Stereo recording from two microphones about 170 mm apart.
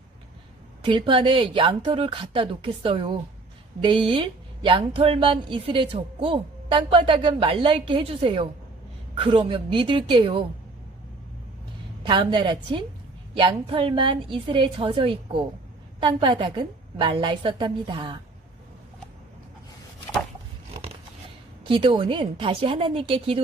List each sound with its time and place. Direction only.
0.8 s speech: 30° right (ahead or behind)
12.0 s a woman's voice: 25° right (ahead or behind)
21.7 s speech: 30° right (ahead or behind)